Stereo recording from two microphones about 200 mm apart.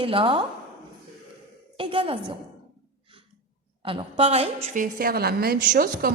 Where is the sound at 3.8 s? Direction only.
30° right (ahead or behind).